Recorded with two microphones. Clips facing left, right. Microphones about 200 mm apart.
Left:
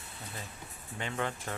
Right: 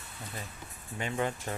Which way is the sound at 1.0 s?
15° right (ahead or behind).